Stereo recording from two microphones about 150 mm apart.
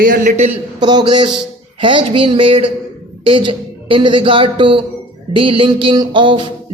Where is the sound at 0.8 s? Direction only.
30° right (ahead or behind).